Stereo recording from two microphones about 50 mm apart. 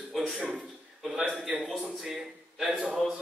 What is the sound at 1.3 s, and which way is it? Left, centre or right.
A man's voice, centre.